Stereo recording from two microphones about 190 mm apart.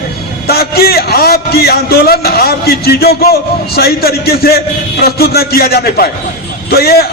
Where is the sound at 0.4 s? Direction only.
55° left (ahead or behind).